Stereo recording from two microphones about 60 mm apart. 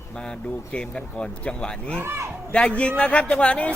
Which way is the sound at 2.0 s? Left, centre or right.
Right.